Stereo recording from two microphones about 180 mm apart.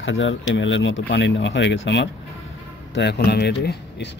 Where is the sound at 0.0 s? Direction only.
90° left.